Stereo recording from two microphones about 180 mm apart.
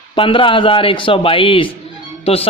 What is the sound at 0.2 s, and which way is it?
A man's voice, 30° left (ahead or behind).